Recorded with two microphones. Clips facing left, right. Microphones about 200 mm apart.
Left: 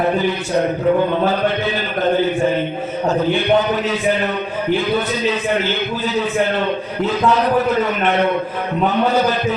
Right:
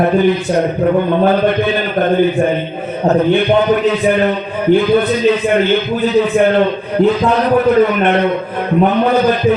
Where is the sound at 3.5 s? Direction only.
60° right (ahead or behind).